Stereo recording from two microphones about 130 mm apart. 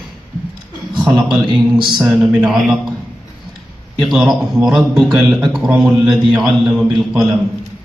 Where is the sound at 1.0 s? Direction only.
5° right (ahead or behind).